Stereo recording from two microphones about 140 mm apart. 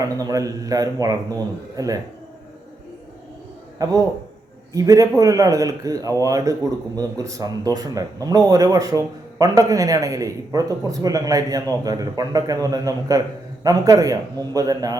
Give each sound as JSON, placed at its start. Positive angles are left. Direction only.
{"t": 0.2, "sound": "speech", "side_deg": -25}
{"t": 3.8, "sound": "speech", "side_deg": -25}